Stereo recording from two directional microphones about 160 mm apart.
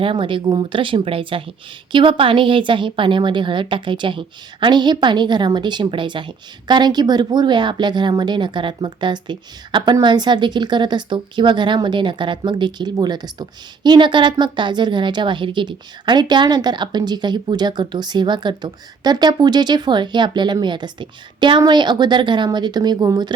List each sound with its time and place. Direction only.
0.0 s a woman's voice: 30° right (ahead or behind)